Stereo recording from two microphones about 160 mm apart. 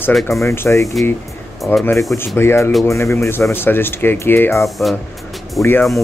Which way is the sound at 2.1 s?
15° left (ahead or behind).